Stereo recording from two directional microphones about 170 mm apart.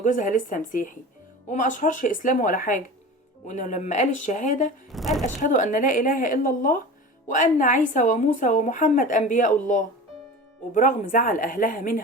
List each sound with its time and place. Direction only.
0.0 s a woman's voice: 50° left (ahead or behind)
4.9 s a woman's voice: centre (ahead or behind)
5.2 s a woman's voice: 45° left (ahead or behind)